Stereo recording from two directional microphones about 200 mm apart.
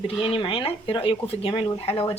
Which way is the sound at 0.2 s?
25° left (ahead or behind).